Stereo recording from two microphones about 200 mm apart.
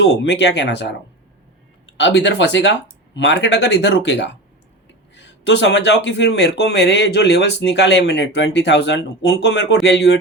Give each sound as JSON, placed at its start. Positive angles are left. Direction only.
{"t": 0.0, "sound": "speech", "side_deg": 60}